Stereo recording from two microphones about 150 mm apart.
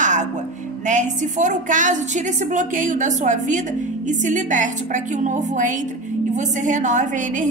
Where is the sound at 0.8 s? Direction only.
55° right (ahead or behind).